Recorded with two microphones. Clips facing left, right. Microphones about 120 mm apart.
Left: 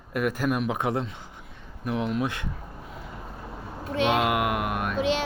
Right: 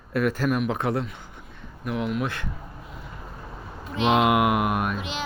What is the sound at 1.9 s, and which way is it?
Speech, 30° left (ahead or behind).